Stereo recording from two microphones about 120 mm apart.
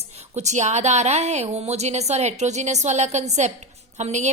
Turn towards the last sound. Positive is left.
turn(degrees=-75)  # may be behind; listen again after turning